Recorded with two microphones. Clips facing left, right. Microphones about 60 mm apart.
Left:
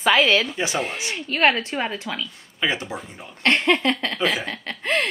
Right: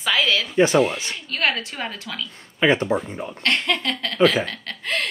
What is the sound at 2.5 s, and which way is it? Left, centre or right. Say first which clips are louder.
Speech: right 7 dB; right.